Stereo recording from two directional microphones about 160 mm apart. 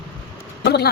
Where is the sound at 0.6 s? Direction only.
90° left.